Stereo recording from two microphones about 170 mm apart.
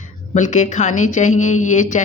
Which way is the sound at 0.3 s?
45° left (ahead or behind).